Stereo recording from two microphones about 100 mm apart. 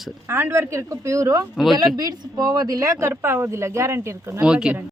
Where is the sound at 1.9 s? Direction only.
40° right (ahead or behind).